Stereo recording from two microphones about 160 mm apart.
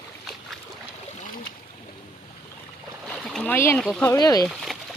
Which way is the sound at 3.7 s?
5° left (ahead or behind).